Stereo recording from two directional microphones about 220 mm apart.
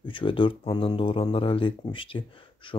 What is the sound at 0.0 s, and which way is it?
Speech, 25° left (ahead or behind).